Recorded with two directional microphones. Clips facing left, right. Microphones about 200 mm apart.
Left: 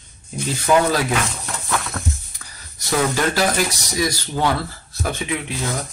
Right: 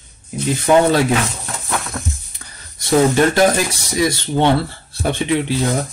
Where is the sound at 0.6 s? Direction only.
25° right (ahead or behind).